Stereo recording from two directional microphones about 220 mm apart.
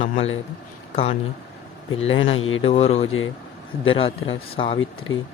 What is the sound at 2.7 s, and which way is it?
Speech, 25° left (ahead or behind).